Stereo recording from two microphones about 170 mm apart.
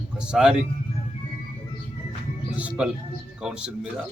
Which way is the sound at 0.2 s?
5° right (ahead or behind).